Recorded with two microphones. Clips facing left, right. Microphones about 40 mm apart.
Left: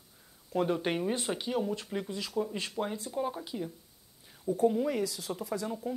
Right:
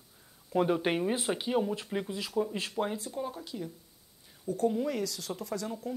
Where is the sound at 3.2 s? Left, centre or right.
Centre.